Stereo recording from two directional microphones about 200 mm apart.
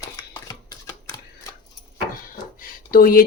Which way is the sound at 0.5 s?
20° left (ahead or behind).